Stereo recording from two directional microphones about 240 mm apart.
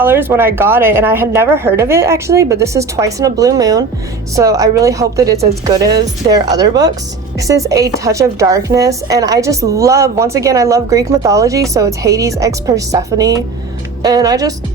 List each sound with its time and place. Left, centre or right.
0.0 s speech: centre
6.5 s speech: centre